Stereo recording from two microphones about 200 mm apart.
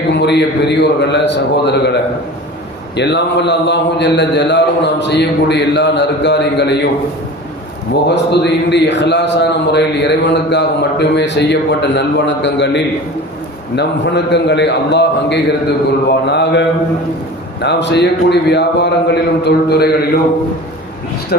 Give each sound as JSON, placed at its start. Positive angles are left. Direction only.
{"t": 0.1, "sound": "speech", "side_deg": 60}
{"t": 8.0, "sound": "speech", "side_deg": 60}